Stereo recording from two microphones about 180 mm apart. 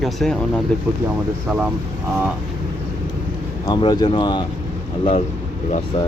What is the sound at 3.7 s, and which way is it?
Speech, 20° left (ahead or behind).